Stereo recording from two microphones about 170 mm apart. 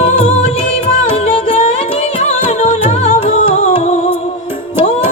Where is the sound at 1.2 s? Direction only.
35° left (ahead or behind).